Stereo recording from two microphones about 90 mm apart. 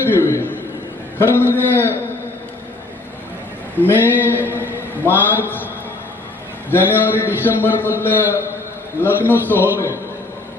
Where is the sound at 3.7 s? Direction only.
20° left (ahead or behind).